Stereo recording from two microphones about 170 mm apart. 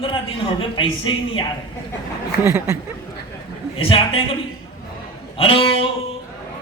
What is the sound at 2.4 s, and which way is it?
Speech, 15° right (ahead or behind).